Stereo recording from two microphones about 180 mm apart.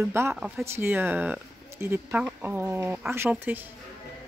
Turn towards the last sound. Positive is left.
turn(degrees=-10)  # may be behind; listen again after turning